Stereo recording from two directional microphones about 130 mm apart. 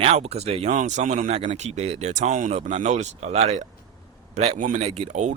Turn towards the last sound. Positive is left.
turn(degrees=-65)  # may be behind; listen again after turning